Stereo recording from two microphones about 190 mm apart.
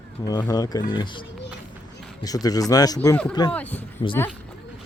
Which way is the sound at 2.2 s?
20° left (ahead or behind).